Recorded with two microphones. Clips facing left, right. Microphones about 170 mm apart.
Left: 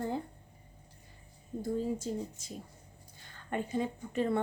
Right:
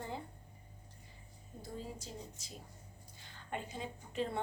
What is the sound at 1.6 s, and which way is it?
Speech, 50° left (ahead or behind).